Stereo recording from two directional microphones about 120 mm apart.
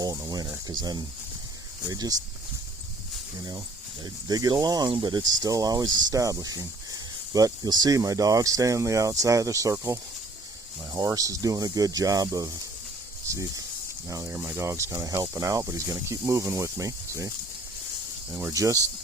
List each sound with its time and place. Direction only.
0.0 s speech: 30° right (ahead or behind)
4.0 s speech: 30° right (ahead or behind)
18.3 s speech: 25° right (ahead or behind)